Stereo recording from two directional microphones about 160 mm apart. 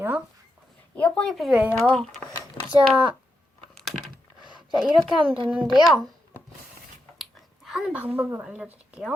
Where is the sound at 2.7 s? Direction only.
30° right (ahead or behind).